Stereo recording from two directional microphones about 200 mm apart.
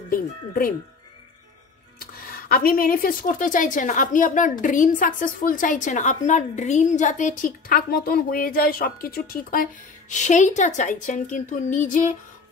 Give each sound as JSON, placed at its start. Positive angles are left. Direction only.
{"t": 0.1, "sound": "speech", "side_deg": 45}
{"t": 2.0, "sound": "speech", "side_deg": 45}